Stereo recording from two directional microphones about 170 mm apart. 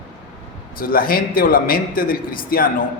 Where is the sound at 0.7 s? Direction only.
60° left (ahead or behind).